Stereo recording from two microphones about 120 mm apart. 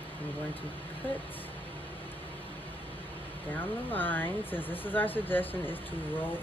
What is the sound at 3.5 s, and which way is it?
Speech, 15° left (ahead or behind).